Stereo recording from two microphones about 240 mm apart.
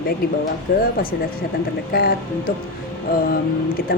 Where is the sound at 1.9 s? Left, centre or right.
Left.